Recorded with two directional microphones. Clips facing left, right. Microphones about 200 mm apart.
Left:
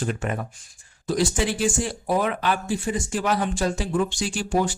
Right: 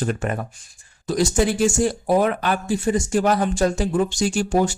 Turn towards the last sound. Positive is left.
turn(degrees=-45)  # may be behind; listen again after turning